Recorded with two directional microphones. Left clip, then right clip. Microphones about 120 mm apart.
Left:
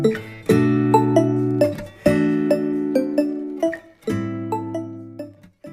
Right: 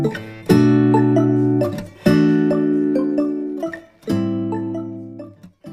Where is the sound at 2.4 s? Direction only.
Centre (ahead or behind).